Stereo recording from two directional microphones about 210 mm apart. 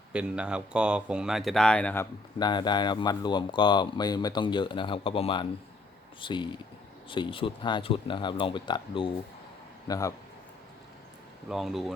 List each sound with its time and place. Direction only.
0.1 s speech: 5° right (ahead or behind)
2.4 s a man's voice: 20° left (ahead or behind)
11.4 s speech: centre (ahead or behind)